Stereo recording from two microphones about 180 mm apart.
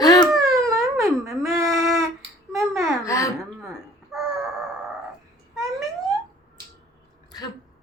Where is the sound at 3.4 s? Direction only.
Centre (ahead or behind).